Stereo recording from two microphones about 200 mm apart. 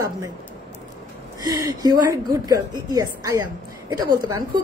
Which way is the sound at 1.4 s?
20° right (ahead or behind).